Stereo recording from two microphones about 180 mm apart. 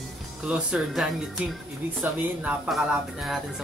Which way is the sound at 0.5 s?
5° right (ahead or behind).